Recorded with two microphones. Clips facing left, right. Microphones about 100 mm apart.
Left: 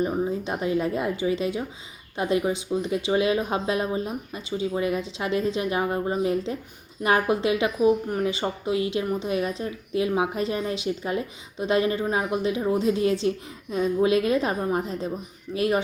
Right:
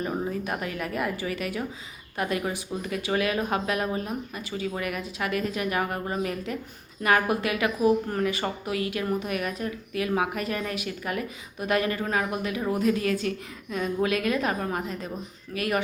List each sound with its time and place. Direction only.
0.3 s speech: 25° left (ahead or behind)